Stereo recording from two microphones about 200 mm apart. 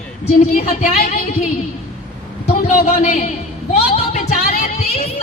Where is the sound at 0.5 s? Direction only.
45° left (ahead or behind).